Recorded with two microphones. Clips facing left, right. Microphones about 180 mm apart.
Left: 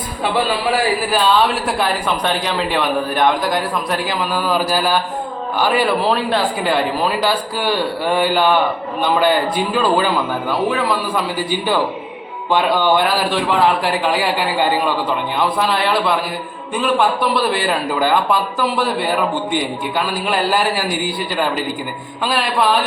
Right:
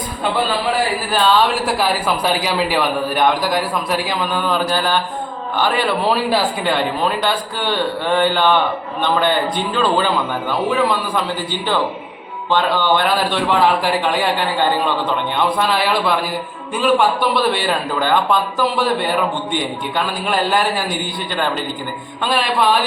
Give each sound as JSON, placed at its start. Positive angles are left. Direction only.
{"t": 1.1, "sound": "speech", "side_deg": 0}
{"t": 12.5, "sound": "speech", "side_deg": 10}